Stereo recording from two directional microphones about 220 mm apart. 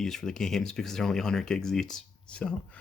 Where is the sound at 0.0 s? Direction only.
Centre (ahead or behind).